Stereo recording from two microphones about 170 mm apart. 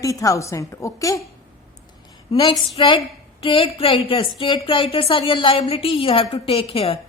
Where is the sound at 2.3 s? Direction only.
25° left (ahead or behind).